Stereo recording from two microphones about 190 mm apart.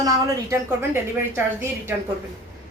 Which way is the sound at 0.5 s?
10° right (ahead or behind).